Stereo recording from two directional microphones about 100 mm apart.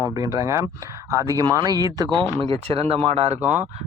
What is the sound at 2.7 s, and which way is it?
Speech, 75° right (ahead or behind).